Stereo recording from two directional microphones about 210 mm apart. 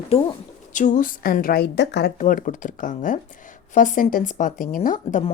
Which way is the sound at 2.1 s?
35° left (ahead or behind).